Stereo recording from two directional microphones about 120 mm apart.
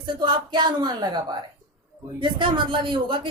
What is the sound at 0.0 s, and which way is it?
A woman's voice, 40° right (ahead or behind).